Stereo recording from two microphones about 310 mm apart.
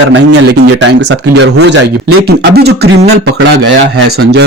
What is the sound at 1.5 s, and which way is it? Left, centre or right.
Speech, right.